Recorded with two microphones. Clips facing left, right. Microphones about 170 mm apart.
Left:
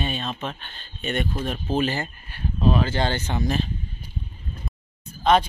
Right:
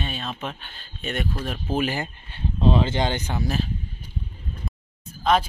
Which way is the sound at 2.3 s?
25° right (ahead or behind).